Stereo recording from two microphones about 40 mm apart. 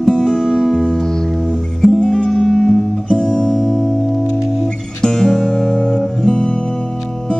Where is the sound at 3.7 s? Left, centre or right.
Centre.